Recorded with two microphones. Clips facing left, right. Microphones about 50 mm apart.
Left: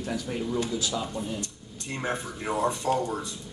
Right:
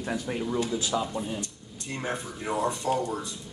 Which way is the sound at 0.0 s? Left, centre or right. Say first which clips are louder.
Right 1 dB; right.